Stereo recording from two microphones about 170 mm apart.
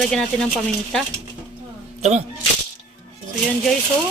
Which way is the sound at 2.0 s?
40° right (ahead or behind).